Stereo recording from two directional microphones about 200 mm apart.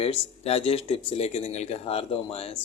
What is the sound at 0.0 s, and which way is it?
Speech, 30° left (ahead or behind).